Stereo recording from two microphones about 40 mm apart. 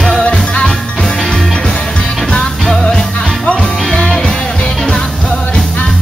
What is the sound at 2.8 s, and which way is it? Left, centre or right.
Music, centre.